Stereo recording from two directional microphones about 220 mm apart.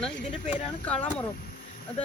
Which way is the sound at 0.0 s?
5° left (ahead or behind).